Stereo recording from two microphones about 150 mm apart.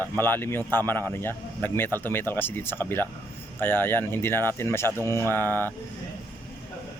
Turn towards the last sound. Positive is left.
turn(degrees=15)  # may be behind; listen again after turning